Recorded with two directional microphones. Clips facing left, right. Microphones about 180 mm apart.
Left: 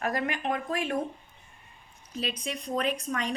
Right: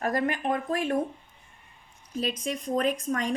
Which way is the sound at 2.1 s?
45° right (ahead or behind).